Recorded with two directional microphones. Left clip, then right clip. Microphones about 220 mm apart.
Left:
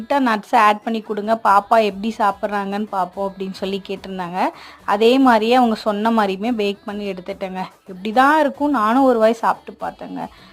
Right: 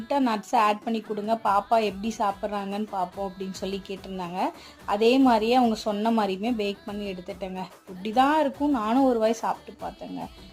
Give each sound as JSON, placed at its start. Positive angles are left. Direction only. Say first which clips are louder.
{"t": 0.1, "sound": "a woman's voice", "louder": "left 8 dB", "side_deg": 15}